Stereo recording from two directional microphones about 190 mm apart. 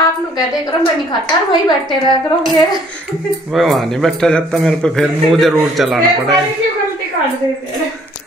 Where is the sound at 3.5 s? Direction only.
Centre (ahead or behind).